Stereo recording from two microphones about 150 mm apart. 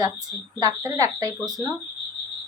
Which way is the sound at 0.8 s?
25° right (ahead or behind).